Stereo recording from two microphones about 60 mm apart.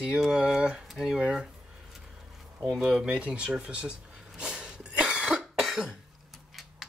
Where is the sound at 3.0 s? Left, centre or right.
Centre.